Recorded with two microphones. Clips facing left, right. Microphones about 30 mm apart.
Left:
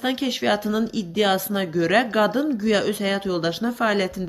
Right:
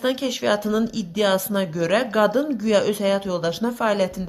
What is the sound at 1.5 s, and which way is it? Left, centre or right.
Speech, left.